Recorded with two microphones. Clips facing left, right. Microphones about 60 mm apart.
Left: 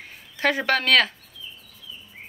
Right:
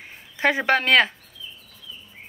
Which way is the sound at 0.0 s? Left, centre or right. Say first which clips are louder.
Right 2 dB; centre.